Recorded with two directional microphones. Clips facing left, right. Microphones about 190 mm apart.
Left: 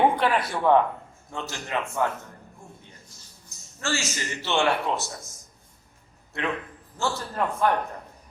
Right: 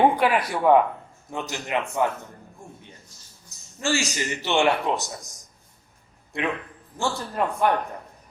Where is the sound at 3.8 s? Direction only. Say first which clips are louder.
Right 4 dB; 15° right (ahead or behind).